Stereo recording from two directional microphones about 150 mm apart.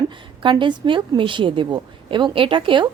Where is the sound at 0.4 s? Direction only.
30° right (ahead or behind).